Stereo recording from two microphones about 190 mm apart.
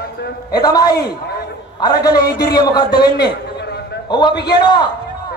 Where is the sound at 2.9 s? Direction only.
60° left (ahead or behind).